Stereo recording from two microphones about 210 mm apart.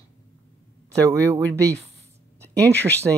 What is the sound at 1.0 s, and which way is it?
Speech, 15° right (ahead or behind).